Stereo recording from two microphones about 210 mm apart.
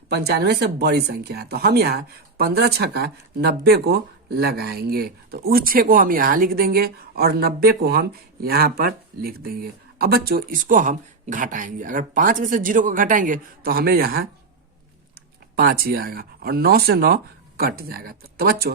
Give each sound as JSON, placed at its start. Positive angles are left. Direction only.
{"t": 0.1, "sound": "speech", "side_deg": -50}
{"t": 15.5, "sound": "speech", "side_deg": -45}